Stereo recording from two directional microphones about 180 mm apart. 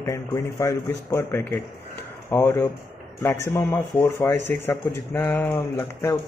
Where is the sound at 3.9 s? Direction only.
15° left (ahead or behind).